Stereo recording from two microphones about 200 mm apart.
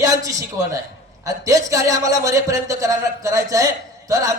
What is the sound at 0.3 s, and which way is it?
A man's voice, 15° right (ahead or behind).